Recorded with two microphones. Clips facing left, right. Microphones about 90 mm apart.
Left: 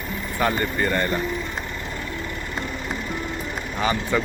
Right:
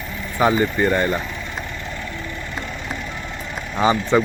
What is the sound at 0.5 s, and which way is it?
Speech, 5° right (ahead or behind).